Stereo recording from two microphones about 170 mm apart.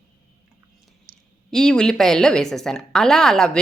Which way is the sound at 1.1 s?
60° right (ahead or behind).